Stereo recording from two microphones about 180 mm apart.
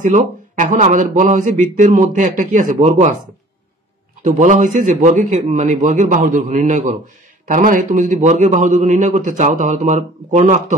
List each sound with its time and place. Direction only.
0.0 s speech: 45° right (ahead or behind)
4.2 s speech: 45° right (ahead or behind)